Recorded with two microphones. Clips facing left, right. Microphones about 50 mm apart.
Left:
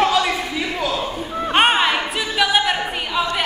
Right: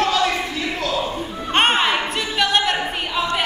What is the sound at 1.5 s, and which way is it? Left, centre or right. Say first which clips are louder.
Music: left 1 dB; centre.